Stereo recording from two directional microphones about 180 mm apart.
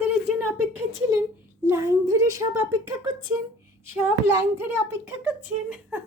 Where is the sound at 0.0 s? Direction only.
10° right (ahead or behind).